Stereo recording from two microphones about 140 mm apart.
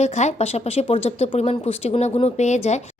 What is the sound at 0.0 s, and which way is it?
Speech, 50° left (ahead or behind).